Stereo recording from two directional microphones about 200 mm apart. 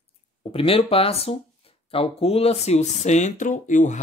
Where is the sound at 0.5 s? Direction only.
30° left (ahead or behind).